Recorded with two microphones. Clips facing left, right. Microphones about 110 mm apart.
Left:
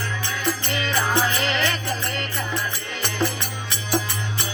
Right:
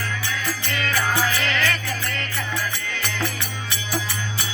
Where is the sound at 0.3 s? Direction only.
25° left (ahead or behind).